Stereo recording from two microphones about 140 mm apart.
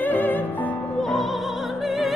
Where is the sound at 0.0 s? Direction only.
10° left (ahead or behind).